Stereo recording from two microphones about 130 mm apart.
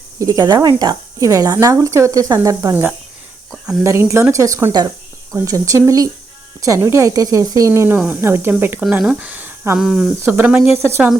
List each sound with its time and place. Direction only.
0.2 s speech: 30° right (ahead or behind)
3.5 s speech: 5° right (ahead or behind)
3.8 s speech: 20° right (ahead or behind)
8.8 s speech: 5° right (ahead or behind)
9.7 s speech: centre (ahead or behind)
10.2 s speech: 10° right (ahead or behind)